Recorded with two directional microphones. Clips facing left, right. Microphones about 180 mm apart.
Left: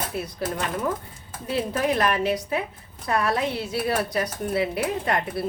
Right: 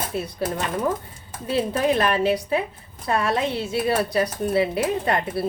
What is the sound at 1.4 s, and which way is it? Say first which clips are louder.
A woman's voice: right 3 dB; 30° right (ahead or behind).